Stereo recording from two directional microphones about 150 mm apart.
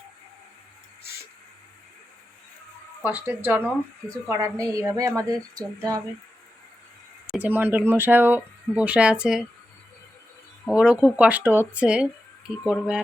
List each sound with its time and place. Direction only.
3.0 s a woman's voice: 15° right (ahead or behind)
7.3 s speech: 10° right (ahead or behind)
10.7 s speech: 5° right (ahead or behind)